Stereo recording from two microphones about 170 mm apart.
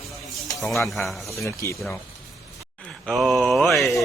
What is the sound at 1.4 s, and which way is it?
Speech, 15° left (ahead or behind).